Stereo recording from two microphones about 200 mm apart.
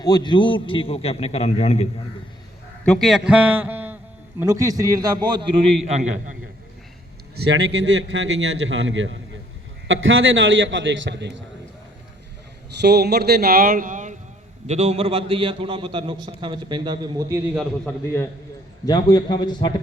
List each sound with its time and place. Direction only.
0.0 s a man's voice: 20° left (ahead or behind)
2.8 s a man's voice: centre (ahead or behind); by 6.0 s 30° right (ahead or behind)
7.3 s a man's voice: 55° right (ahead or behind)
12.8 s a man's voice: 55° right (ahead or behind); by 17.4 s 15° right (ahead or behind)
17.5 s a man's voice: centre (ahead or behind)
18.9 s a man's voice: 20° left (ahead or behind)